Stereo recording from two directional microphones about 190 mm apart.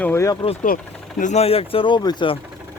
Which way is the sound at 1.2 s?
35° left (ahead or behind).